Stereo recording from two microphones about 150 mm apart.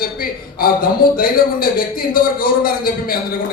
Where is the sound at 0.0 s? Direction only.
75° left (ahead or behind).